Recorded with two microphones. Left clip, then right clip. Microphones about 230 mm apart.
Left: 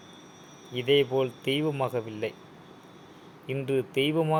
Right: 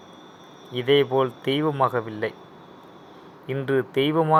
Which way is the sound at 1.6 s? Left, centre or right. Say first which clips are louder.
Right 7 dB; centre.